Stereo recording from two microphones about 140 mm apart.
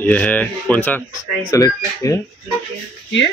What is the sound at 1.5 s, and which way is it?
Speech, 25° left (ahead or behind).